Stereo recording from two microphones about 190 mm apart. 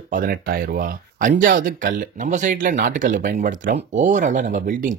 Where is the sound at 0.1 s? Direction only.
50° right (ahead or behind).